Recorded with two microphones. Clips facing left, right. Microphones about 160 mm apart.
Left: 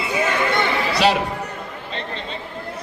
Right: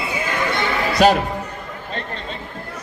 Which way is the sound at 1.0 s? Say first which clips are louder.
Right 4 dB; 45° right (ahead or behind).